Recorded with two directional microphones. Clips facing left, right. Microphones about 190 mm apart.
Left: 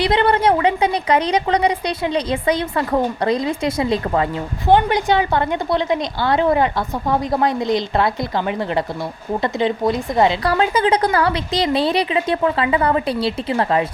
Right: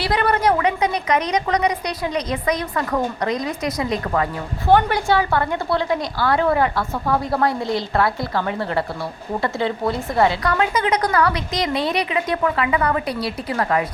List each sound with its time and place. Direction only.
0.0 s a woman's voice: 25° left (ahead or behind)
10.4 s a woman's voice: 30° left (ahead or behind)